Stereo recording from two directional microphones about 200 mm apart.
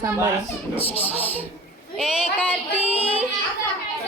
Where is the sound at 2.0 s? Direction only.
Centre (ahead or behind).